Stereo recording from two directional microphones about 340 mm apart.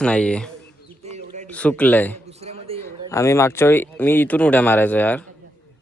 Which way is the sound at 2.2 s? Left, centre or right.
Centre.